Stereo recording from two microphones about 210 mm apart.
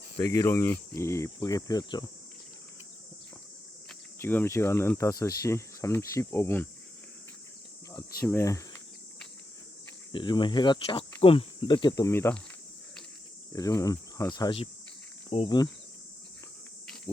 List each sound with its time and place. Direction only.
0.2 s speech: 15° left (ahead or behind)
4.2 s speech: 10° left (ahead or behind)
8.2 s speech: 15° left (ahead or behind)
10.1 s speech: 20° left (ahead or behind)
13.5 s speech: 15° left (ahead or behind)